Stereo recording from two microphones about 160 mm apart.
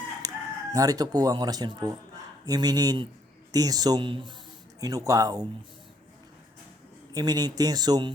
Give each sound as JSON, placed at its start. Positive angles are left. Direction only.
{"t": 0.2, "sound": "crowing", "side_deg": -20}
{"t": 0.7, "sound": "speech", "side_deg": -20}
{"t": 7.1, "sound": "speech", "side_deg": -25}